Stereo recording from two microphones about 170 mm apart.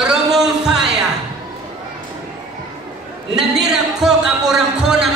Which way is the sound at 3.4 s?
5° right (ahead or behind).